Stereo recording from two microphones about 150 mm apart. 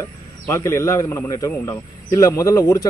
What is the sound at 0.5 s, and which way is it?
Speech, 20° left (ahead or behind).